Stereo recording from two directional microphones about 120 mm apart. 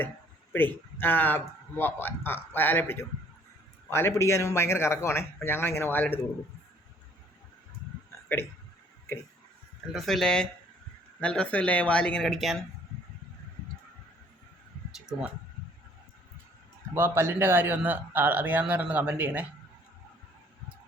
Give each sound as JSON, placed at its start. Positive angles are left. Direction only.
{"t": 0.5, "sound": "a man's voice", "side_deg": 15}
{"t": 9.9, "sound": "a man's voice", "side_deg": 0}
{"t": 16.9, "sound": "speech", "side_deg": -20}